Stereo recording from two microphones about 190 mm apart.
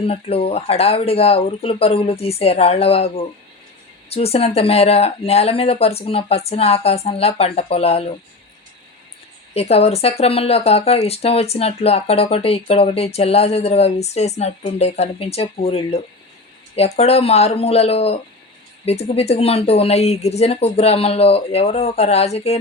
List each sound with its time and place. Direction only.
0.0 s speech: 30° left (ahead or behind)
9.6 s speech: 30° left (ahead or behind)